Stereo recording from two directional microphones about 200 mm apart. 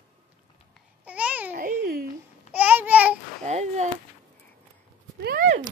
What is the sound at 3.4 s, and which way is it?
Speech, 35° right (ahead or behind).